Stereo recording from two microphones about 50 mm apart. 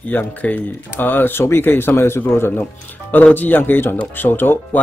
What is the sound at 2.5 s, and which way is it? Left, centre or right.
Speech, left.